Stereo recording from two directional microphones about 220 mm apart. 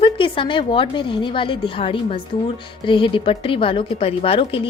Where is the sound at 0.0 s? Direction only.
25° left (ahead or behind).